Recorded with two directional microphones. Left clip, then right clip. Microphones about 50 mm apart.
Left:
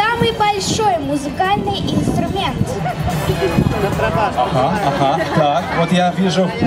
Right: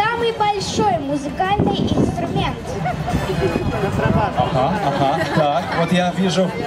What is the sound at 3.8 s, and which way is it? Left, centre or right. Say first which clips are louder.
Speech: left 3 dB; left.